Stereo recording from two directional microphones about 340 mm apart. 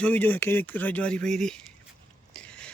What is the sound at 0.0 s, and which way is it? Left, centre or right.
A man's voice, centre.